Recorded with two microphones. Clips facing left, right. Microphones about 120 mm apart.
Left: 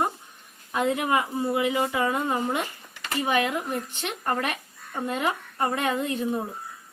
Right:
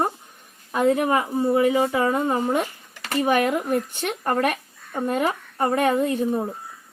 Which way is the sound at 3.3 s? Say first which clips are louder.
Right 5 dB; 45° right (ahead or behind).